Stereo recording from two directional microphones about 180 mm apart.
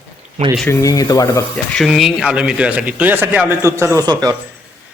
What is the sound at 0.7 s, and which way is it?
Speech, 15° left (ahead or behind).